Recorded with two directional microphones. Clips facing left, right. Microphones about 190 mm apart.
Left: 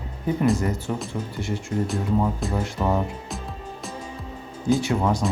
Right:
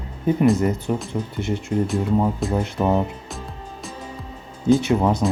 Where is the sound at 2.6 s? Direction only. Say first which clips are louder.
Right 3 dB; 20° right (ahead or behind).